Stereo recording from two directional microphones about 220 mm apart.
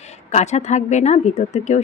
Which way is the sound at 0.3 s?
30° left (ahead or behind).